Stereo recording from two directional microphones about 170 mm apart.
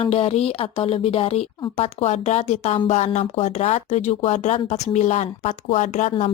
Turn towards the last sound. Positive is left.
turn(degrees=40)  # may be behind; listen again after turning